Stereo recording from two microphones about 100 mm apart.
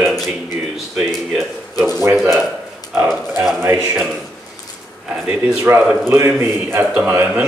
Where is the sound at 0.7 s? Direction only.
5° right (ahead or behind).